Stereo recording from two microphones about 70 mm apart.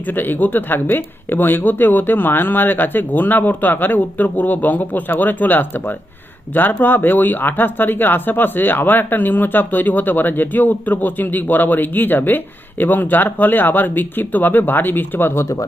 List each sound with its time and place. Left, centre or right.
0.1 s speech: left